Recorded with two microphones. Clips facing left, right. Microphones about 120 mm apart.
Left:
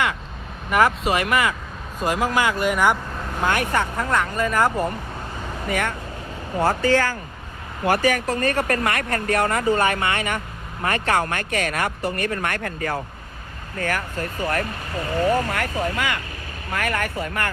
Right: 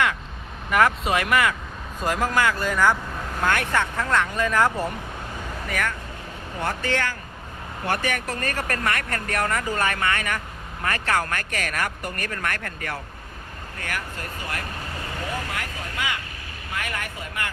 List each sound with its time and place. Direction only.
0.7 s speech: centre (ahead or behind)
5.6 s speech: 25° left (ahead or behind)
6.6 s speech: 35° left (ahead or behind)
15.4 s speech: 55° left (ahead or behind)